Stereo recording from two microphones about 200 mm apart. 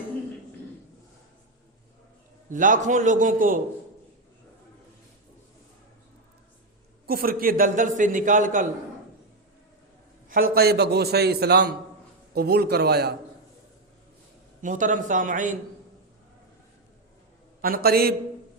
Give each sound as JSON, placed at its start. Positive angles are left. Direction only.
{"t": 2.5, "sound": "a man's voice", "side_deg": -40}
{"t": 7.1, "sound": "a man's voice", "side_deg": -50}
{"t": 10.2, "sound": "a man's voice", "side_deg": -45}
{"t": 14.6, "sound": "a man's voice", "side_deg": -40}
{"t": 17.6, "sound": "a man's voice", "side_deg": -50}